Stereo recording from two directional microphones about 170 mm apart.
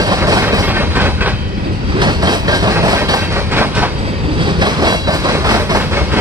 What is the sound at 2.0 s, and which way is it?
Train, 25° right (ahead or behind).